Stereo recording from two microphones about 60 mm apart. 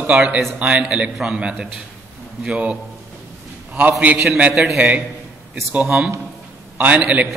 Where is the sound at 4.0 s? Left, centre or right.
Right.